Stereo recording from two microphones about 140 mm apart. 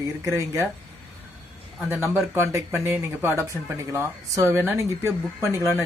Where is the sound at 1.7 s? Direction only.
15° right (ahead or behind).